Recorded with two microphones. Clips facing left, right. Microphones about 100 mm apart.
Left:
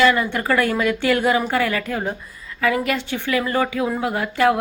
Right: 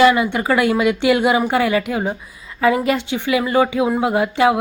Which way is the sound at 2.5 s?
25° right (ahead or behind).